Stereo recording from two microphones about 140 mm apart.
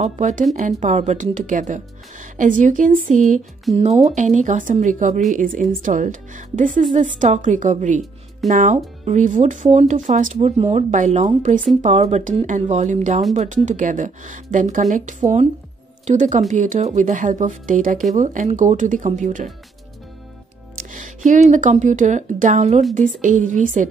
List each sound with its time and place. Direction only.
0.0 s speech: 60° right (ahead or behind)
3.7 s speech: 50° right (ahead or behind)
20.7 s speech: 65° right (ahead or behind)